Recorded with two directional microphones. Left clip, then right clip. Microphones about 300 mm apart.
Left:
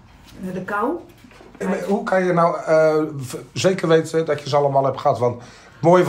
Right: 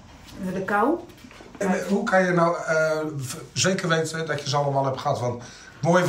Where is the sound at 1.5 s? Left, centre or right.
Centre.